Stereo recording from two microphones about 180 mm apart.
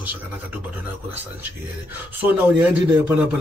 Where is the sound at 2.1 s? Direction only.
10° right (ahead or behind).